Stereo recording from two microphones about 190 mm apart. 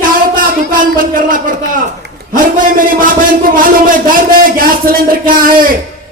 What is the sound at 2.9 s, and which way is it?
Speech, 45° right (ahead or behind).